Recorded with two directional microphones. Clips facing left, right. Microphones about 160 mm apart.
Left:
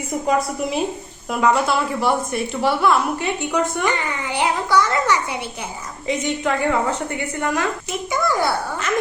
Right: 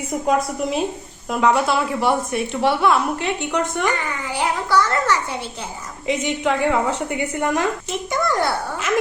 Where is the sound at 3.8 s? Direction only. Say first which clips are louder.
Left 1 dB; 20° left (ahead or behind).